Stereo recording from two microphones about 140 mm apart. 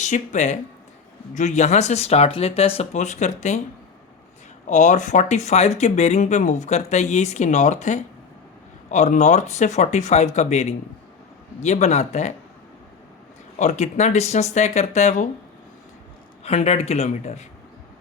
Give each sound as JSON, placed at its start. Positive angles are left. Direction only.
{"t": 0.0, "sound": "speech", "side_deg": 60}
{"t": 4.6, "sound": "speech", "side_deg": 60}
{"t": 13.6, "sound": "speech", "side_deg": 60}
{"t": 16.4, "sound": "speech", "side_deg": 50}